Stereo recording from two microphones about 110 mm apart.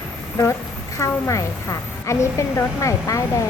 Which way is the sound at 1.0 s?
30° left (ahead or behind).